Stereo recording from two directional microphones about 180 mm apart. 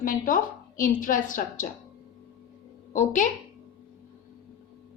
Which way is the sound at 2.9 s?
45° left (ahead or behind).